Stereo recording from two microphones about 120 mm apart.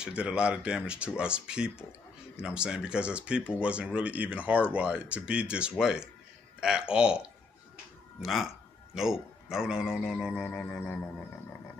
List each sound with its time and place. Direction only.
0.0 s a man's voice: 10° right (ahead or behind); by 11.0 s 10° left (ahead or behind)